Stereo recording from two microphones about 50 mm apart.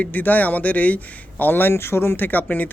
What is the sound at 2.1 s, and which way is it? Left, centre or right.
Speech, left.